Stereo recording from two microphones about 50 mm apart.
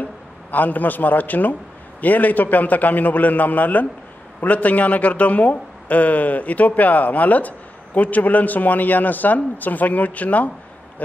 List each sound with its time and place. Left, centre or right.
0.5 s a man's voice: left